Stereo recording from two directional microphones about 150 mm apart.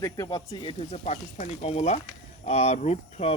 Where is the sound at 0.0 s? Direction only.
25° left (ahead or behind).